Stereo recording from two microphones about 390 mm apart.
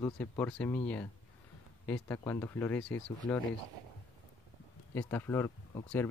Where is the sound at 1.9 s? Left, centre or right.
Centre.